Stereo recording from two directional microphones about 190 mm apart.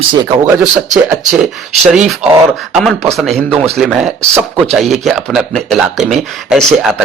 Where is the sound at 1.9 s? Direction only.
5° right (ahead or behind).